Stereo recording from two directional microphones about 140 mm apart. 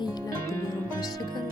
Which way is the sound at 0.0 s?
25° left (ahead or behind).